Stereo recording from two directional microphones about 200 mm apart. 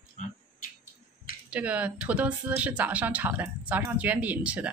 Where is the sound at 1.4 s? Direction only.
5° right (ahead or behind).